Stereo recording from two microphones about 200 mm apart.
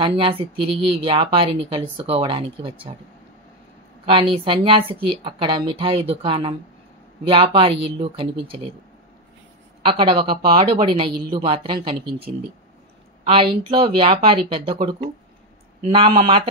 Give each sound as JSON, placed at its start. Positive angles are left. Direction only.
{"t": 0.0, "sound": "speech", "side_deg": -25}
{"t": 4.0, "sound": "speech", "side_deg": -25}
{"t": 9.8, "sound": "speech", "side_deg": -25}
{"t": 13.2, "sound": "speech", "side_deg": -25}